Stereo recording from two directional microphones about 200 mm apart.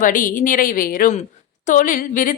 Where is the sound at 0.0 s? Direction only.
40° left (ahead or behind).